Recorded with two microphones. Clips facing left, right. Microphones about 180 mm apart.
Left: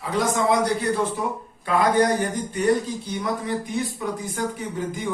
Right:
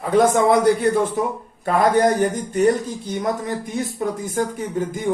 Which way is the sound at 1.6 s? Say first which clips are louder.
Right 3 dB; 45° right (ahead or behind).